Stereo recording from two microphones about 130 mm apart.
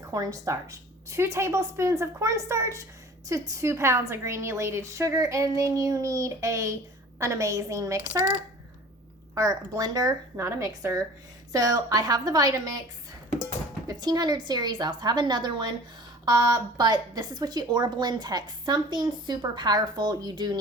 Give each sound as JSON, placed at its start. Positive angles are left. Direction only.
{"t": 0.0, "sound": "a woman's voice", "side_deg": -25}
{"t": 9.3, "sound": "a woman's voice", "side_deg": -25}
{"t": 13.8, "sound": "a woman's voice", "side_deg": -30}